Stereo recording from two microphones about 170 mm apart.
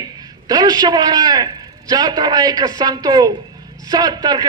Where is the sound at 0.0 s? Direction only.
25° right (ahead or behind).